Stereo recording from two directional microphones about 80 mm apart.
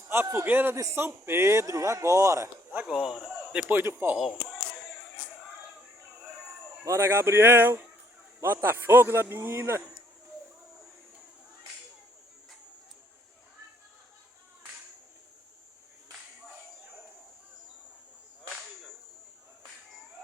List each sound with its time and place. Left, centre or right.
0.1 s speech: right
2.8 s a man's voice: centre
3.7 s speech: right
6.8 s speech: right